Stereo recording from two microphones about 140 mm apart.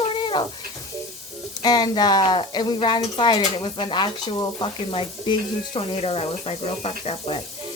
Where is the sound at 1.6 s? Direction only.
30° left (ahead or behind).